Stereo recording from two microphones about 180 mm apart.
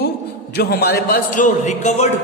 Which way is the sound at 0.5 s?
60° left (ahead or behind).